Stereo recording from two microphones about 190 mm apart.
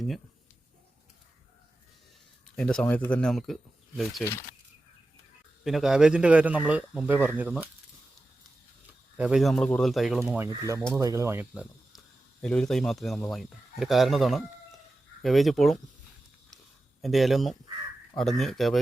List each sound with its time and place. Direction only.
2.6 s speech: 5° left (ahead or behind)
4.2 s speech: 15° left (ahead or behind)
5.6 s a man's voice: centre (ahead or behind)
9.1 s speech: 5° right (ahead or behind)
10.4 s a man's voice: 15° right (ahead or behind); by 15.8 s centre (ahead or behind)
17.0 s speech: centre (ahead or behind)